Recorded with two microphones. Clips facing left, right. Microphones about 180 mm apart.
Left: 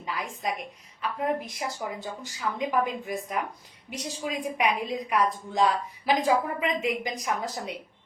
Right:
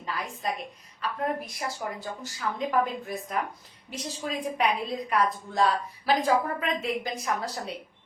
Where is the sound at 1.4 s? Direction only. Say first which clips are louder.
Left 1 dB; 15° left (ahead or behind).